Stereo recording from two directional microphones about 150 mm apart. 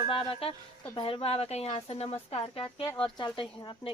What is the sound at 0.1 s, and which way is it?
Speech, 40° left (ahead or behind).